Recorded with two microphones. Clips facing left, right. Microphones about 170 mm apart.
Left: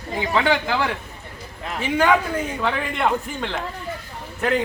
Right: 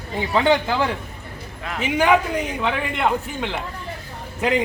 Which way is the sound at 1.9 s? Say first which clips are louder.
Right 1 dB; 15° right (ahead or behind).